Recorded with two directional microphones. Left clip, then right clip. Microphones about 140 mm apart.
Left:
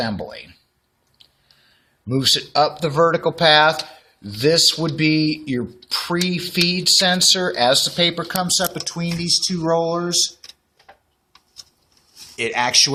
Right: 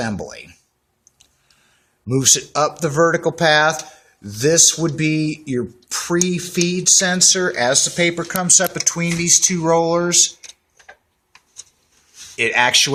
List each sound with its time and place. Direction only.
0.0 s speech: 50° right (ahead or behind)
2.0 s speech: 45° right (ahead or behind)
7.8 s speech: 20° right (ahead or behind)
8.1 s speech: 40° right (ahead or behind)
12.4 s speech: 40° right (ahead or behind)